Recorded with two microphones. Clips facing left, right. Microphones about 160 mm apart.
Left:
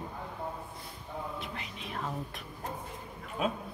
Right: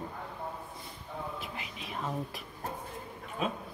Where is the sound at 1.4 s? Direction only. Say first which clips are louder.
Left 1 dB; 5° right (ahead or behind).